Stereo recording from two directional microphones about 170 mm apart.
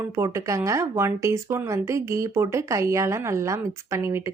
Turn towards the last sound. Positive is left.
turn(degrees=-15)  # may be behind; listen again after turning